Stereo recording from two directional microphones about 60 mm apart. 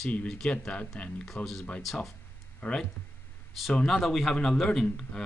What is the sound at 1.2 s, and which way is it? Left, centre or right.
A man's voice, centre.